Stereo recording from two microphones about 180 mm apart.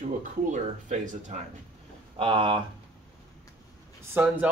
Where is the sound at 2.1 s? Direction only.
30° right (ahead or behind).